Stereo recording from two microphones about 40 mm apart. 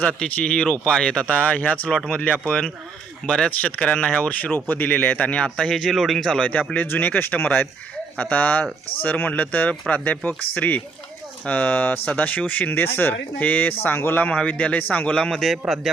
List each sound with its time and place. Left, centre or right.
0.2 s speech: left
4.7 s speech: left
5.7 s speech: centre
6.4 s speech: left
6.8 s speech: left
12.7 s speech: left
13.4 s speech: left
14.3 s speech: left
15.1 s speech: centre